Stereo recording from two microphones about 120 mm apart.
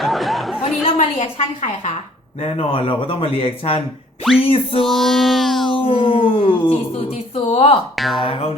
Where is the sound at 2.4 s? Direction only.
50° left (ahead or behind).